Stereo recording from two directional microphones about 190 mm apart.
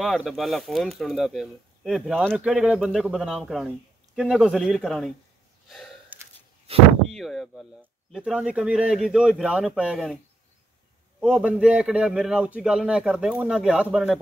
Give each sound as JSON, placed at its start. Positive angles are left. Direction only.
{"t": 0.0, "sound": "speech", "side_deg": 0}
{"t": 5.7, "sound": "gasp", "side_deg": 0}
{"t": 6.7, "sound": "speech", "side_deg": -30}
{"t": 7.1, "sound": "speech", "side_deg": 0}
{"t": 11.1, "sound": "speech", "side_deg": -5}